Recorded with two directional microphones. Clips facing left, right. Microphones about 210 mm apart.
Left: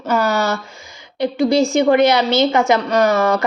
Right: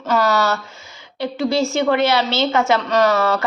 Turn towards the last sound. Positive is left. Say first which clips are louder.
# left 2 dB
turn(degrees=15)  # may be behind; listen again after turning